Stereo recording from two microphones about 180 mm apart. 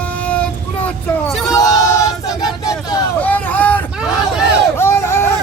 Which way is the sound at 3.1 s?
10° left (ahead or behind).